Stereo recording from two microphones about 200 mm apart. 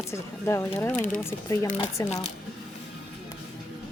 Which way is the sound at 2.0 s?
35° left (ahead or behind).